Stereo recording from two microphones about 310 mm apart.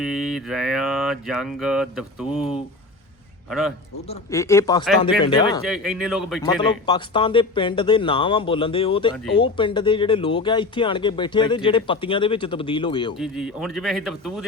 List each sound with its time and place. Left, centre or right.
0.0 s speech: centre
4.3 s speech: centre
5.6 s speech: centre
6.4 s speech: centre
13.1 s speech: centre